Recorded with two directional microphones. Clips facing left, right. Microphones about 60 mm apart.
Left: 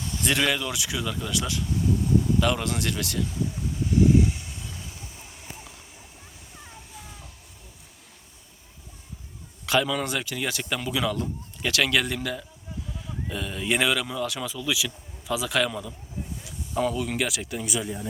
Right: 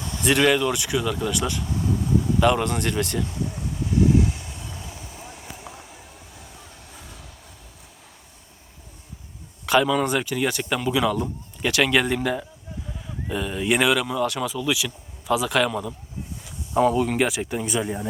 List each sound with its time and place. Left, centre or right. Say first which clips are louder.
0.3 s speech: right 6 dB; centre
0.7 s speech: right 6 dB; centre
2.6 s speech: right 4 dB; centre
4.3 s vehicle: right 1 dB; centre
9.6 s speech: right 5 dB; centre
13.2 s speech: right 5 dB; centre
16.7 s speech: right 7 dB; centre